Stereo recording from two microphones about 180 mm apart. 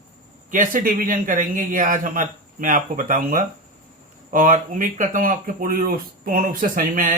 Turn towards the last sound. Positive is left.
turn(degrees=-45)  # may be behind; listen again after turning